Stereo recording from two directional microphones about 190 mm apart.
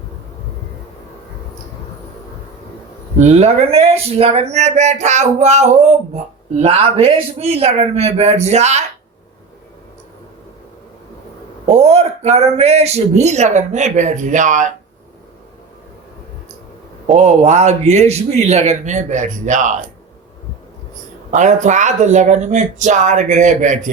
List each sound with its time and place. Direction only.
3.2 s speech: 35° right (ahead or behind)
11.6 s speech: 35° right (ahead or behind)
17.1 s speech: 35° right (ahead or behind)
21.2 s speech: 40° right (ahead or behind)